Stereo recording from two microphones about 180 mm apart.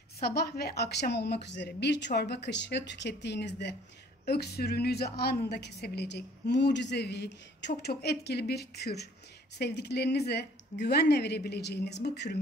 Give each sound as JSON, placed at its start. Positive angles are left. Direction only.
{"t": 0.2, "sound": "a woman's voice", "side_deg": 60}